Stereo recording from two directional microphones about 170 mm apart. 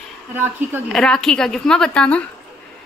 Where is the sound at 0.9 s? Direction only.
Centre (ahead or behind).